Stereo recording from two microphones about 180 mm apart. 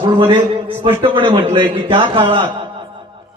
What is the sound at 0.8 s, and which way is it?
A man's voice, 30° right (ahead or behind).